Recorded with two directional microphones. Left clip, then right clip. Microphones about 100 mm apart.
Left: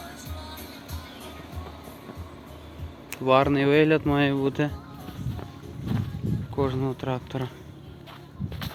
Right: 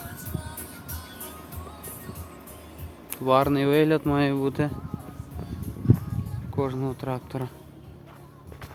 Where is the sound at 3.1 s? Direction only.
25° right (ahead or behind).